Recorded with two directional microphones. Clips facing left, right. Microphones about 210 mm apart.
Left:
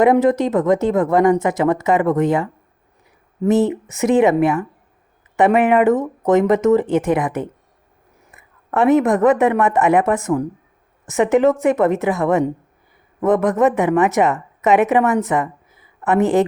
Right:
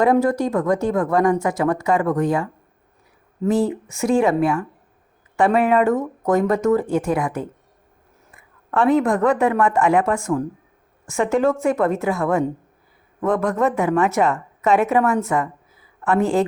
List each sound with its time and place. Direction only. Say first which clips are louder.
0.0 s speech: left 3 dB; 20° left (ahead or behind)